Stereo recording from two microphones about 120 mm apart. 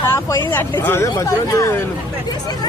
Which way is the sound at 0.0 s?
20° left (ahead or behind).